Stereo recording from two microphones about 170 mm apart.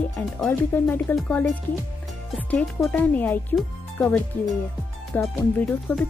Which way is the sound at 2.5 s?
5° left (ahead or behind).